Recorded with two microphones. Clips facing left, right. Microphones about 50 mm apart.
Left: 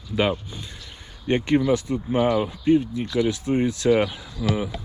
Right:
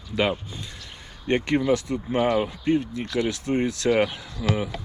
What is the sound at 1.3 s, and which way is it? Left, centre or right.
Speech, right.